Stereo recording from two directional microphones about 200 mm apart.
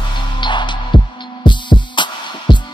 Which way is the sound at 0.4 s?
25° left (ahead or behind).